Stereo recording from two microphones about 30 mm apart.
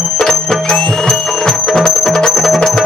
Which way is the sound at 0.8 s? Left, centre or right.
Left.